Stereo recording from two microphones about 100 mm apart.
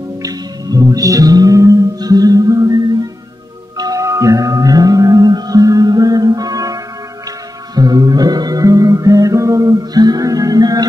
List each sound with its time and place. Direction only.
0.2 s music: 35° right (ahead or behind)